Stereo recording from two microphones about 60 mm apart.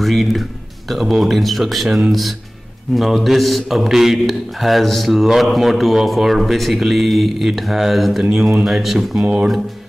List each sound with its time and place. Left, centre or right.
0.0 s a man's voice: centre
9.2 s speech: centre